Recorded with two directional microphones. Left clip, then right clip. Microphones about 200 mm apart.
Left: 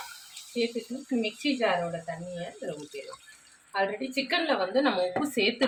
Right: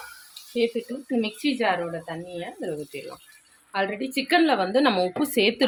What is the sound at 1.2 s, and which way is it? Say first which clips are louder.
Speech: right 2 dB; 55° right (ahead or behind).